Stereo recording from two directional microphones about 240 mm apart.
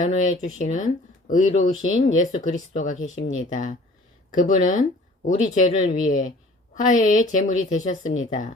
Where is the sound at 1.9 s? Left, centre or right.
Left.